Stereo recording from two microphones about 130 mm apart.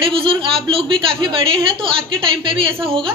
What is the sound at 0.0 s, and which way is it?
A woman's voice, 45° right (ahead or behind).